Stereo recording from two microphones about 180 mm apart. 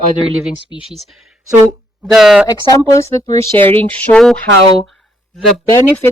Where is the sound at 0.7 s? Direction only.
25° left (ahead or behind).